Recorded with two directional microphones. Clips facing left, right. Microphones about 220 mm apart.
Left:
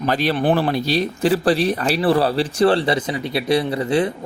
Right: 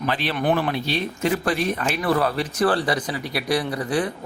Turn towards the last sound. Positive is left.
turn(degrees=25)  # may be behind; listen again after turning